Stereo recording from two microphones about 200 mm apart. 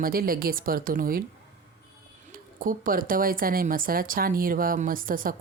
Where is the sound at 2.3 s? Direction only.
45° right (ahead or behind).